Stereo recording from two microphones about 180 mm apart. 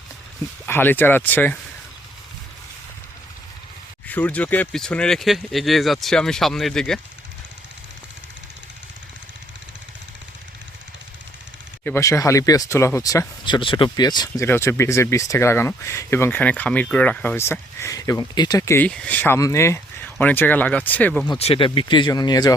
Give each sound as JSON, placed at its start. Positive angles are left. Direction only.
{"t": 0.6, "sound": "speech", "side_deg": 10}
{"t": 4.0, "sound": "speech", "side_deg": 10}
{"t": 11.9, "sound": "speech", "side_deg": 15}
{"t": 21.2, "sound": "speech", "side_deg": 35}